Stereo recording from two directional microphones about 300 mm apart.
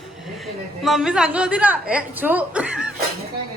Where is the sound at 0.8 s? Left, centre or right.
Centre.